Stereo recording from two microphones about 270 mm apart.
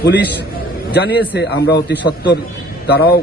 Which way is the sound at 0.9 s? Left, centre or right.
Left.